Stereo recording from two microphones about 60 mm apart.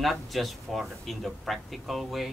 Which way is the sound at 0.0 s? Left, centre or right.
Centre.